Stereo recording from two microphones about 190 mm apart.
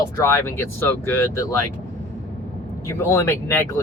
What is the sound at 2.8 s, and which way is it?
Speech, 15° left (ahead or behind).